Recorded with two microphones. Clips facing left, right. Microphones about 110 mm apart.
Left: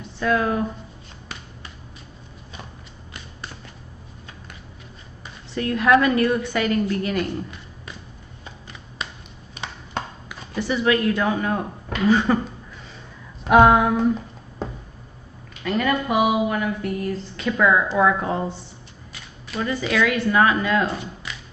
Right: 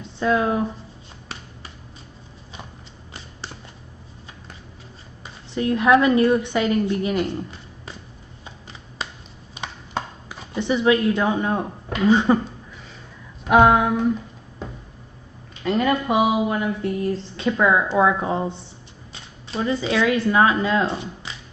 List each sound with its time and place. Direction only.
0.2 s speech: 20° right (ahead or behind)
5.2 s speech: 20° right (ahead or behind)
9.0 s a sound: 30° right (ahead or behind)
10.2 s speech: 20° right (ahead or behind)
13.5 s a sound: centre (ahead or behind)
15.6 s speech: 25° right (ahead or behind)